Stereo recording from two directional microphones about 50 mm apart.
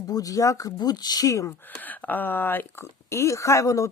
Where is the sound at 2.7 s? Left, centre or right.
Left.